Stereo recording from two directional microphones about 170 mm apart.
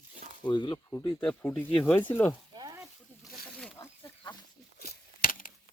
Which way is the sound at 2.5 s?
20° right (ahead or behind).